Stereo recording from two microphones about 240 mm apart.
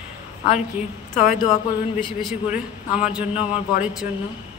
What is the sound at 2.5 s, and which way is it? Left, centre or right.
A woman's voice, centre.